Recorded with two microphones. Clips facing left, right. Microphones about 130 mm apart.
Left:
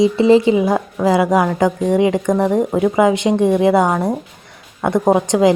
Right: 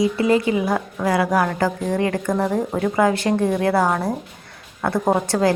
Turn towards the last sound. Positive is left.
turn(degrees=20)  # may be behind; listen again after turning